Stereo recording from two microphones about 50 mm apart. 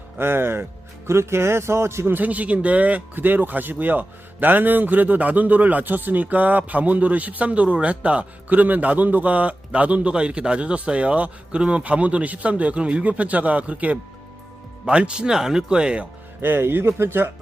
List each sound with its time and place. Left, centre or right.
0.2 s speech: right
2.1 s a man's voice: right
3.2 s a man's voice: right; by 16.0 s centre
16.4 s speech: right